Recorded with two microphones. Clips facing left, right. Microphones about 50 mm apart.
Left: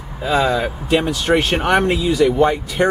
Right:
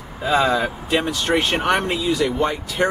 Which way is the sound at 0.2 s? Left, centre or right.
Centre.